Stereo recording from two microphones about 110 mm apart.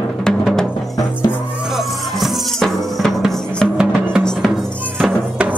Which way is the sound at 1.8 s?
Centre (ahead or behind).